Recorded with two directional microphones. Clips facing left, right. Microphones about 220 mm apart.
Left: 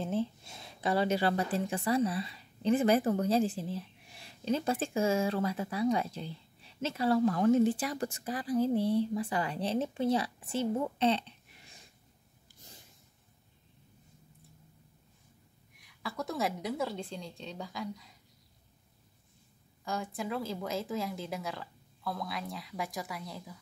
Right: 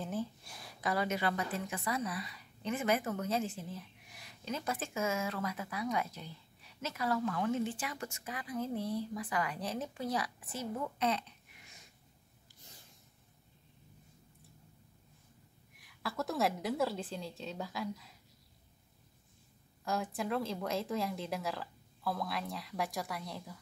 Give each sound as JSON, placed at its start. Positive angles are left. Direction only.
{"t": 0.0, "sound": "a woman's voice", "side_deg": 25}
{"t": 15.8, "sound": "speech", "side_deg": 0}
{"t": 19.8, "sound": "speech", "side_deg": 0}